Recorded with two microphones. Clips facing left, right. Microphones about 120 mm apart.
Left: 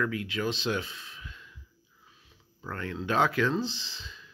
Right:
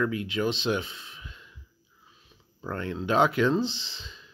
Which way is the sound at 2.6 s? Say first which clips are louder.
Right 4 dB; 25° right (ahead or behind).